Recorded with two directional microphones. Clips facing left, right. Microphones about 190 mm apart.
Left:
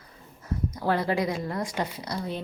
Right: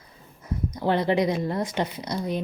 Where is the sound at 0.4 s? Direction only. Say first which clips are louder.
Right 2 dB; 20° right (ahead or behind).